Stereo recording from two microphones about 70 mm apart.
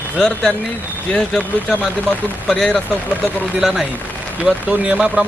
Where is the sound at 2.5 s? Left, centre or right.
Centre.